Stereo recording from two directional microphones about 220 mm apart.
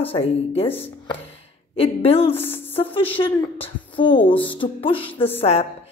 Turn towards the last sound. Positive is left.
turn(degrees=25)  # may be behind; listen again after turning